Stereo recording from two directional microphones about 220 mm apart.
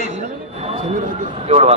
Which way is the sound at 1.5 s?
30° right (ahead or behind).